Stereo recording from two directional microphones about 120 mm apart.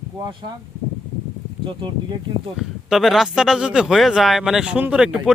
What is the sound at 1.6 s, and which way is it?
Speech, 45° right (ahead or behind).